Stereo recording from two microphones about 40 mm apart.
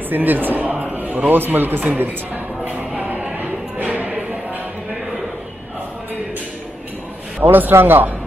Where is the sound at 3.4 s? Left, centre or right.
Right.